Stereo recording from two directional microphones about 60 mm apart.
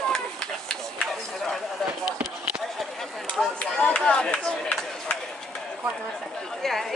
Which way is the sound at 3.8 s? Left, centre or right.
Centre.